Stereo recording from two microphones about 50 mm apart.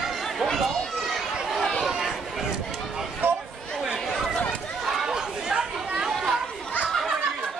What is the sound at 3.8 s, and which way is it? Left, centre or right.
Chatter, centre.